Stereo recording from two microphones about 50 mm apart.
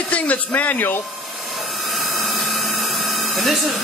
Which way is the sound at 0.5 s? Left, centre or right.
Left.